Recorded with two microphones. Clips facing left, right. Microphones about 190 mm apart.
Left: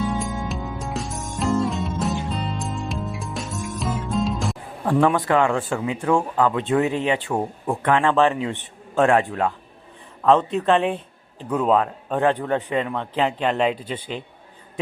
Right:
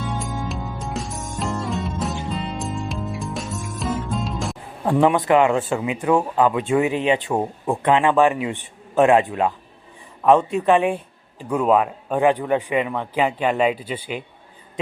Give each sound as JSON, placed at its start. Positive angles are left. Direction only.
{"t": 0.0, "sound": "music", "side_deg": 0}
{"t": 4.9, "sound": "speech", "side_deg": -15}